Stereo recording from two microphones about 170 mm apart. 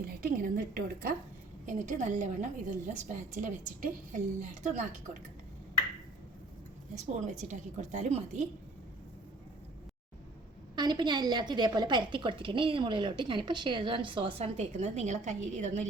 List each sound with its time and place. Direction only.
0.0 s a woman's voice: 60° right (ahead or behind)
1.6 s a woman's voice: 45° right (ahead or behind)
6.9 s a woman's voice: 45° right (ahead or behind)
10.8 s a woman's voice: 25° right (ahead or behind); by 15.9 s 45° right (ahead or behind)